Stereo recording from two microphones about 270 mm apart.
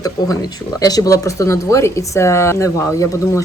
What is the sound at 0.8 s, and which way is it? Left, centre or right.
Speech, centre.